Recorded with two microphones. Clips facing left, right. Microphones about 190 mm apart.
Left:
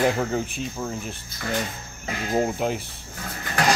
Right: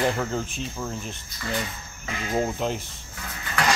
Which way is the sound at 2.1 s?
40° left (ahead or behind).